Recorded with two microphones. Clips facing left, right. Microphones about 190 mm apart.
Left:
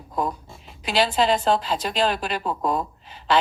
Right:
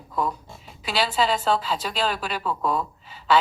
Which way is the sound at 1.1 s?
20° left (ahead or behind).